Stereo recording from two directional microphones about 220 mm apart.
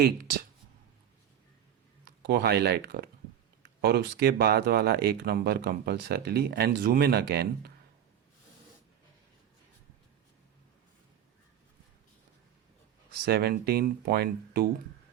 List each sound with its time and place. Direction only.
0.0 s speech: 45° right (ahead or behind)
2.2 s speech: 45° right (ahead or behind)
13.2 s speech: 45° right (ahead or behind)